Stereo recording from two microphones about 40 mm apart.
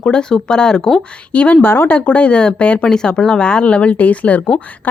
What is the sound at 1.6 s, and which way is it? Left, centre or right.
Speech, left.